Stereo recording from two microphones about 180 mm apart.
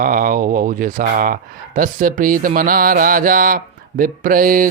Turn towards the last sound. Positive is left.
turn(degrees=-50)  # may be behind; listen again after turning